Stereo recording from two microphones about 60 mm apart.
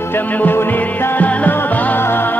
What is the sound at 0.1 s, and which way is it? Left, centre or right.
Music, left.